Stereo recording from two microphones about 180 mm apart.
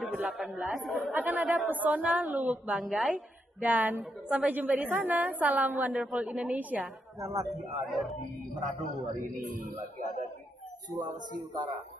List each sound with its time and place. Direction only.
0.0 s a woman's voice: 10° right (ahead or behind)
9.0 s speech: 45° right (ahead or behind)